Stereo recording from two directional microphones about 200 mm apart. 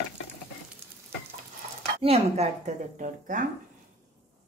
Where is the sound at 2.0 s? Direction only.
30° right (ahead or behind).